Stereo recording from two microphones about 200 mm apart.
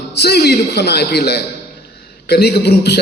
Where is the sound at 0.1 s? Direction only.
55° left (ahead or behind).